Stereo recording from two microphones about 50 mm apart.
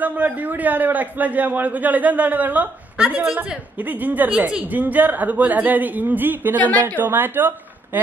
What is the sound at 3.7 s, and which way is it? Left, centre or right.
Speech, right.